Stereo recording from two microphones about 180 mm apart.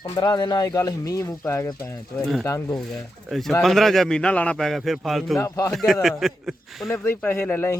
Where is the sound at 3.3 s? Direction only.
Centre (ahead or behind).